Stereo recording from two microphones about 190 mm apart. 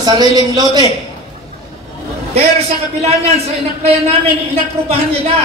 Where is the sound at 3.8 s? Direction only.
30° right (ahead or behind).